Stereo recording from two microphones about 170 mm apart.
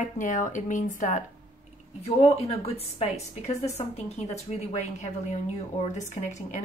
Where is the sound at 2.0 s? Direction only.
35° left (ahead or behind).